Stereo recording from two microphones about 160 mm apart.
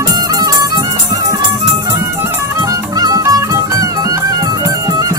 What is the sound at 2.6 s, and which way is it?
Music, 25° right (ahead or behind).